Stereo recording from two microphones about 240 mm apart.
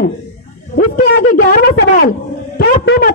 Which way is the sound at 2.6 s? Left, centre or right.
Left.